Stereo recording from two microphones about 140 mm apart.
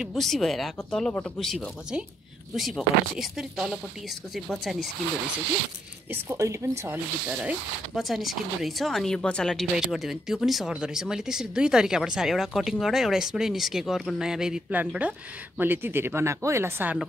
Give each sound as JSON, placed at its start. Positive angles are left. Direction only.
{"t": 0.0, "sound": "speech", "side_deg": 0}
{"t": 6.2, "sound": "a woman's voice", "side_deg": -20}
{"t": 6.8, "sound": "speech", "side_deg": -10}